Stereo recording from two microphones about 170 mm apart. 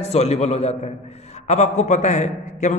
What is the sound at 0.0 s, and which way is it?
A man's voice, 40° left (ahead or behind).